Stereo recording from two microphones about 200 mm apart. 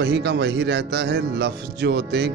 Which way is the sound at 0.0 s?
60° right (ahead or behind).